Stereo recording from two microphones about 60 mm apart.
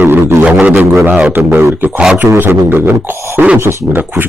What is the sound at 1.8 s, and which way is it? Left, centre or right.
Didgeridoo, right.